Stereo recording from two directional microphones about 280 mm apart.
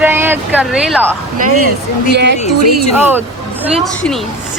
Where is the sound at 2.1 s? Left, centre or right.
Right.